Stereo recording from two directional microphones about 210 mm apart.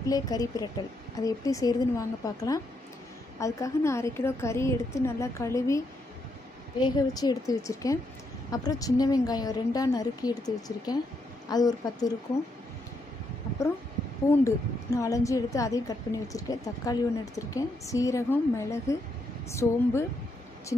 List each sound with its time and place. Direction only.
0.1 s a woman's voice: 15° left (ahead or behind)
6.8 s a woman's voice: 20° left (ahead or behind)
14.3 s a woman's voice: 15° left (ahead or behind)